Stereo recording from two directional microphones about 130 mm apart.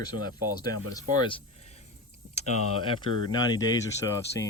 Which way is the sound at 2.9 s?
30° left (ahead or behind).